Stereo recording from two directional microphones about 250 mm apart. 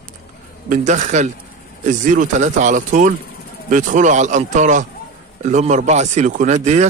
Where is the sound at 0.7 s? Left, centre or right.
Right.